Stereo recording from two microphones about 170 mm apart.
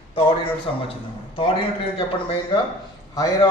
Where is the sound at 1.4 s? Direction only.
30° left (ahead or behind).